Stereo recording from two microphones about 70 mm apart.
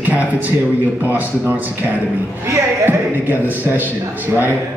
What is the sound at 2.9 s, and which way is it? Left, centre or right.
A man's voice, right.